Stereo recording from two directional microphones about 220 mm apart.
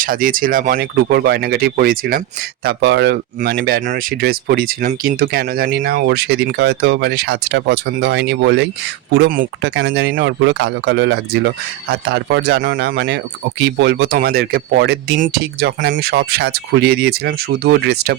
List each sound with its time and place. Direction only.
0.0 s speech: 40° right (ahead or behind)
2.6 s speech: 50° right (ahead or behind)
9.6 s speech: 55° right (ahead or behind)